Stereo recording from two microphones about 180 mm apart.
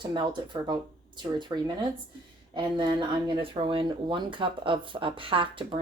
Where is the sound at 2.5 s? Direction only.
25° right (ahead or behind).